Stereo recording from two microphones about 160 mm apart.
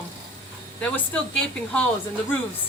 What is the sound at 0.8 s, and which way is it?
Speech, 10° left (ahead or behind).